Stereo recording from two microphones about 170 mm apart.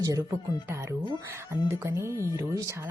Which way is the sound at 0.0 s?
20° right (ahead or behind).